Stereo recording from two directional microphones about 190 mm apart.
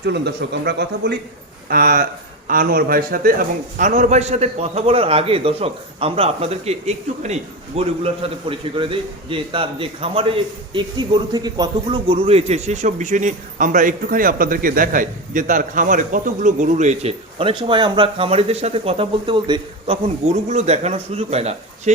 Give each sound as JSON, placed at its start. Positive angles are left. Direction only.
{"t": 0.0, "sound": "a man's voice", "side_deg": -60}